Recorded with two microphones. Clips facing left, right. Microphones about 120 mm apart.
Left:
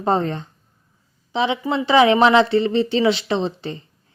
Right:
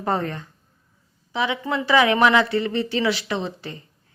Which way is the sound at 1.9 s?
25° left (ahead or behind).